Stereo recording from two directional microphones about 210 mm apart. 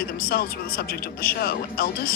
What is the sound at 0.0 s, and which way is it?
Speech, 45° left (ahead or behind).